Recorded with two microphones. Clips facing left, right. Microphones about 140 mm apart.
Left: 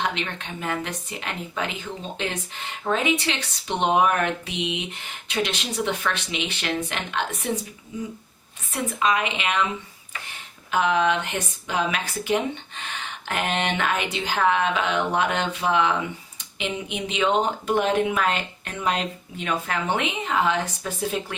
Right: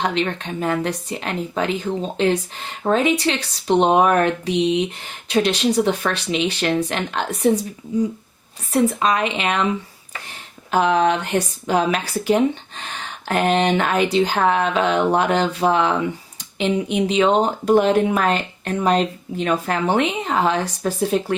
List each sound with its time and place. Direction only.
0.0 s speech: 35° right (ahead or behind)
8.7 s speech: 35° right (ahead or behind)
10.7 s speech: 35° right (ahead or behind)